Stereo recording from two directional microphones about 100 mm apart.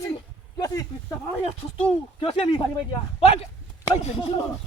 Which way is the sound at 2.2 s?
70° left (ahead or behind).